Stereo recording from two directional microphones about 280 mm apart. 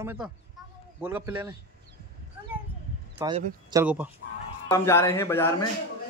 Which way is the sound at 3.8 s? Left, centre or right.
Centre.